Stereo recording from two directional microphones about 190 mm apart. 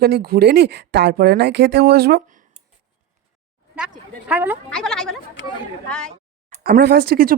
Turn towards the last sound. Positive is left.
turn(degrees=-55)  # may be behind; listen again after turning